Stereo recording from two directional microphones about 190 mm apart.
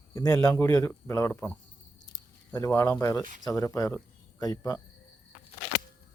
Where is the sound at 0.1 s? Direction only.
15° left (ahead or behind).